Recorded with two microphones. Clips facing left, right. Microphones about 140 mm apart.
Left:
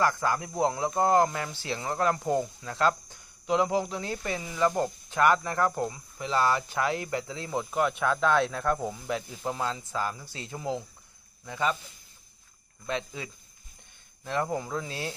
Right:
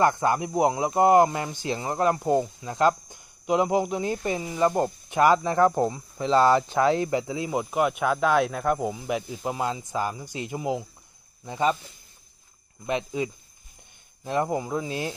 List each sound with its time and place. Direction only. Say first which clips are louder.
0.0 s speech: right 5 dB; 20° right (ahead or behind)
11.4 s speech: right 5 dB; 25° right (ahead or behind)
12.8 s speech: right 6 dB; 20° right (ahead or behind)